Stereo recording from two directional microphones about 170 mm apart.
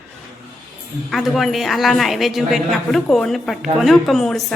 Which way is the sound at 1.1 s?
Centre (ahead or behind).